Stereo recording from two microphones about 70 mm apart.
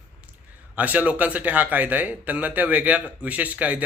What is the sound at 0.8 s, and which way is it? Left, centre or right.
Speech, right.